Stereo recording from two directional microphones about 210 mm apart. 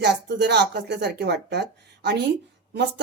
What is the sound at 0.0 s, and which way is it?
Speech, 55° right (ahead or behind).